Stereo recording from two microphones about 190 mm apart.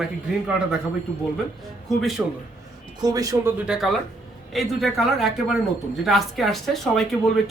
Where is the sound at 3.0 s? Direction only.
20° right (ahead or behind).